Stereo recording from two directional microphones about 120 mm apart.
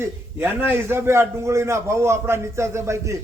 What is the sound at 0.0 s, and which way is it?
A man's voice, 20° right (ahead or behind).